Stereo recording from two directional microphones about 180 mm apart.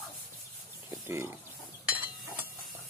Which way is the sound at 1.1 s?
15° right (ahead or behind).